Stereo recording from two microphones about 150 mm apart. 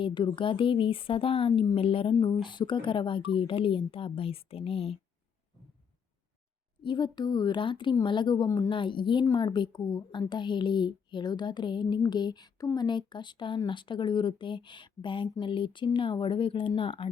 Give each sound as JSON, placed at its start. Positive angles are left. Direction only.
{"t": 0.0, "sound": "speech", "side_deg": 35}
{"t": 6.8, "sound": "a woman's voice", "side_deg": 30}